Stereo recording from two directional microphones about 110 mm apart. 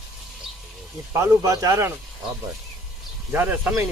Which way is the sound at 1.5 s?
30° right (ahead or behind).